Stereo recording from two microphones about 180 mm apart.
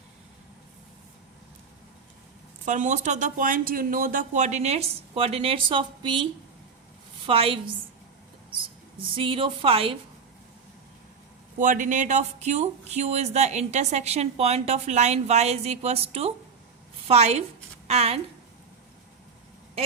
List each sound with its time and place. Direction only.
2.6 s speech: 40° right (ahead or behind); by 6.2 s 25° right (ahead or behind)
7.3 s a woman's voice: 30° right (ahead or behind)
9.1 s a woman's voice: 30° right (ahead or behind)
11.6 s a woman's voice: 45° right (ahead or behind)